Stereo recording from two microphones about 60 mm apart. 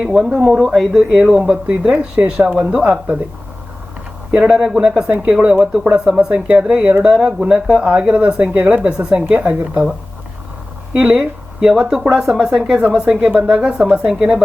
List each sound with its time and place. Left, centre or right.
0.0 s speech: centre
1.6 s speech: centre
4.3 s speech: centre
10.9 s speech: centre